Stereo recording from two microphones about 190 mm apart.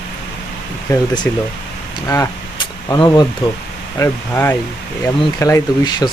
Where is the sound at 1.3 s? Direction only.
10° left (ahead or behind).